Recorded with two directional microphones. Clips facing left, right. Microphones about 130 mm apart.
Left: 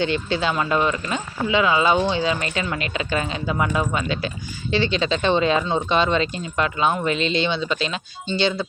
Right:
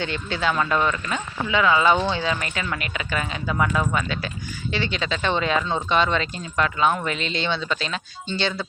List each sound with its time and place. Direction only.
0.0 s speech: 25° left (ahead or behind)